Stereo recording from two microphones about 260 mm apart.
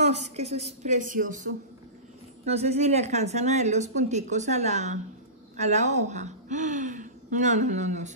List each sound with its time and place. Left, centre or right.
0.0 s a woman's voice: right
2.5 s a woman's voice: right